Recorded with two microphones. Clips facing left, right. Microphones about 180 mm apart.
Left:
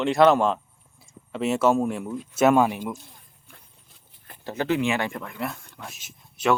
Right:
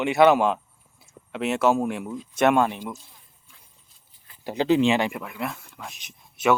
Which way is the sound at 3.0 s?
60° left (ahead or behind).